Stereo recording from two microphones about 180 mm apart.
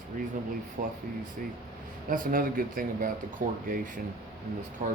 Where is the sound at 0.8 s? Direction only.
50° right (ahead or behind).